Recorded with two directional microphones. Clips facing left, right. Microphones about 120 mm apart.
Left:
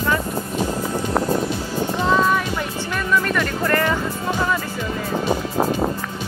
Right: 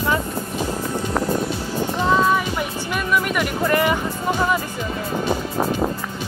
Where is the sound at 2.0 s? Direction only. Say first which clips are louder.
Right 1 dB; 5° right (ahead or behind).